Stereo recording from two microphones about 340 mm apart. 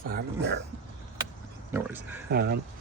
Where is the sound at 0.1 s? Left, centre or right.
Right.